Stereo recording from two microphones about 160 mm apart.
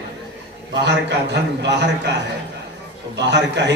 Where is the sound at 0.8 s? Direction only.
90° right.